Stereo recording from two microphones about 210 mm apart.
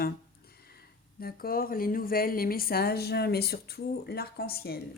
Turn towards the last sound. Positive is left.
turn(degrees=50)  # may be behind; listen again after turning